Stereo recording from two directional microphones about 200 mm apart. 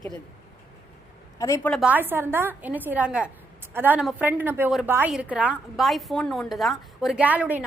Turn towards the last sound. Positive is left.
turn(degrees=-5)  # may be behind; listen again after turning